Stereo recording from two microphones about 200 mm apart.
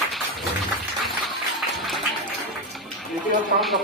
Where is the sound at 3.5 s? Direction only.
Centre (ahead or behind).